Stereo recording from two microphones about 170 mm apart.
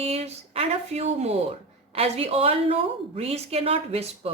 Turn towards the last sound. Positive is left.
turn(degrees=-35)  # may be behind; listen again after turning